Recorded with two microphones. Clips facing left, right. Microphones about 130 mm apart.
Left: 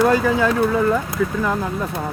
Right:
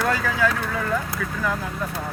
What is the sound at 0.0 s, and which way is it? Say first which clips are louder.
Speech: left 6 dB; 20° left (ahead or behind).